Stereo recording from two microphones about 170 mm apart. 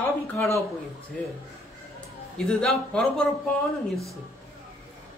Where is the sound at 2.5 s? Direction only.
5° left (ahead or behind).